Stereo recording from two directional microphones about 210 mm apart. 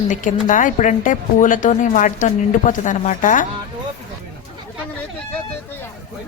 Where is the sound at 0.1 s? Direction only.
40° left (ahead or behind).